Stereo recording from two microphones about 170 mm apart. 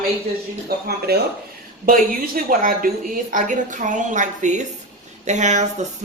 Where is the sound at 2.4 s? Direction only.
55° right (ahead or behind).